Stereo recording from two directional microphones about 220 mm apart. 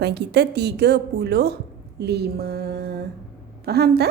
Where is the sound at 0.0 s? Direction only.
50° right (ahead or behind).